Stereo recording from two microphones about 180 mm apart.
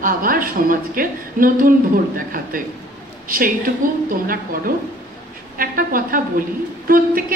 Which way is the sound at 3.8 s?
50° right (ahead or behind).